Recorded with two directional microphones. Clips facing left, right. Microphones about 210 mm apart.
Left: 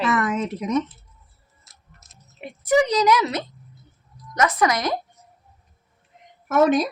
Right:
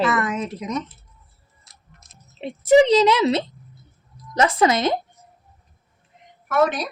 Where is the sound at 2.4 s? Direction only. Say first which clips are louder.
Right 5 dB; 25° right (ahead or behind).